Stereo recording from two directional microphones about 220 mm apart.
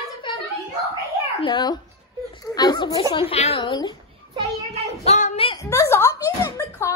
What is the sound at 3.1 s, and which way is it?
Speech, 25° left (ahead or behind).